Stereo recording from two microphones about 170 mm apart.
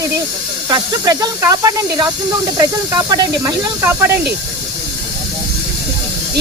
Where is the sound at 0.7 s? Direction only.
20° right (ahead or behind).